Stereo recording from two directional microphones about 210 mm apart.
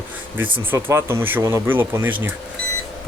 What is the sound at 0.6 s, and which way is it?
A man's voice, 10° right (ahead or behind).